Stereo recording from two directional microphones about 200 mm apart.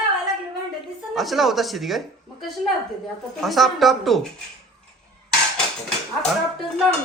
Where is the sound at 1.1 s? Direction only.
Centre (ahead or behind).